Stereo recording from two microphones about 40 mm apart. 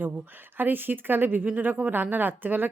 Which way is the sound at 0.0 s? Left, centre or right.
Right.